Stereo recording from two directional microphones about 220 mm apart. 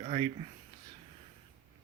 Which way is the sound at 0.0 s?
30° right (ahead or behind).